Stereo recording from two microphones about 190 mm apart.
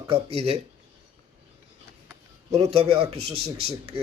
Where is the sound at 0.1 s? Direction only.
30° right (ahead or behind).